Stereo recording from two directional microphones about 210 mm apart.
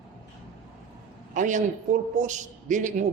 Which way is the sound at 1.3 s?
35° right (ahead or behind).